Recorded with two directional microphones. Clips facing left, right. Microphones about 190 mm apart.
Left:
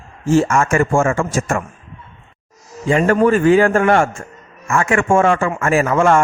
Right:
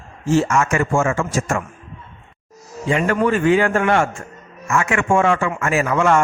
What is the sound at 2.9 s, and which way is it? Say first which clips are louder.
Speech: left 4 dB; 40° left (ahead or behind).